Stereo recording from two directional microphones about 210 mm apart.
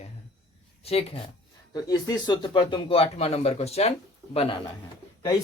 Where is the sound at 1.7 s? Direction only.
15° left (ahead or behind).